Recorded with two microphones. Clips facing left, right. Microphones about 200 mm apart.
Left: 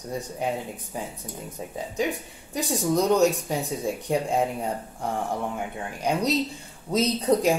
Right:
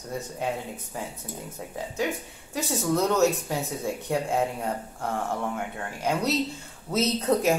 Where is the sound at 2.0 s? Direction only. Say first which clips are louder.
Left 2 dB; 15° left (ahead or behind).